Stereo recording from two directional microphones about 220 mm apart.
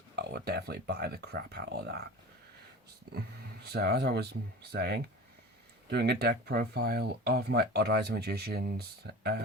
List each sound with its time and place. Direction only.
0.2 s speech: 45° right (ahead or behind)
3.1 s speech: 45° right (ahead or behind)